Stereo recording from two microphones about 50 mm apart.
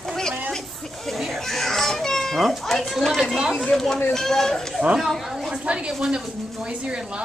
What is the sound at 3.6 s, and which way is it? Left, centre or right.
Speech, centre.